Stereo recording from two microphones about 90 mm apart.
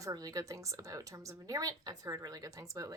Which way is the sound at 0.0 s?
40° right (ahead or behind).